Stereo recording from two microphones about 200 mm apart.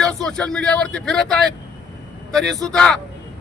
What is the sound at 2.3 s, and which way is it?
Speech, centre (ahead or behind).